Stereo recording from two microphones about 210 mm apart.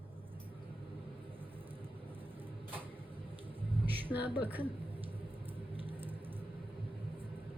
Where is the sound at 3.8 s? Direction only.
10° right (ahead or behind).